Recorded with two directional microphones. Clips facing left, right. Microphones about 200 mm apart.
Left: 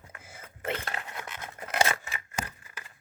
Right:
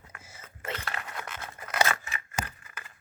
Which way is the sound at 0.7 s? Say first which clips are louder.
Left 2 dB; 25° left (ahead or behind).